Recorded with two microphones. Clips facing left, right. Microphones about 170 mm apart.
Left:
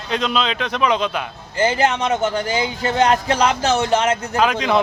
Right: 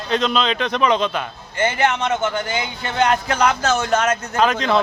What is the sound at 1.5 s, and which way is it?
A man's voice, 35° left (ahead or behind).